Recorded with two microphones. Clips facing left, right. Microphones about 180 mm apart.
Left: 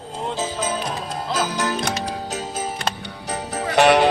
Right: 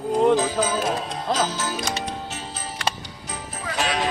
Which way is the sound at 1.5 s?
60° left (ahead or behind).